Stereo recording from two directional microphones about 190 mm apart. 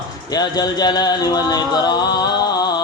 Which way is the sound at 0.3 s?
20° left (ahead or behind).